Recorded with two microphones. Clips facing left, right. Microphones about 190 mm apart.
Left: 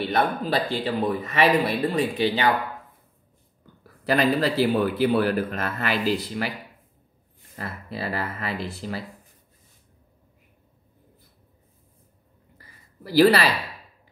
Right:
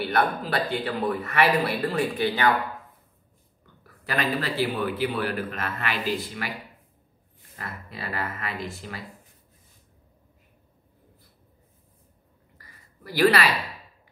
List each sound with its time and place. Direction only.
0.1 s speech: 25° left (ahead or behind)
4.0 s a man's voice: 35° left (ahead or behind)
7.5 s a man's voice: 35° left (ahead or behind)
13.0 s a man's voice: 35° left (ahead or behind)